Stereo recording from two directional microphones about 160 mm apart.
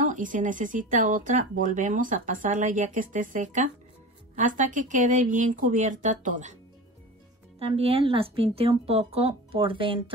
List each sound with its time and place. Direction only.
0.1 s speech: 55° right (ahead or behind)
7.5 s speech: 40° right (ahead or behind)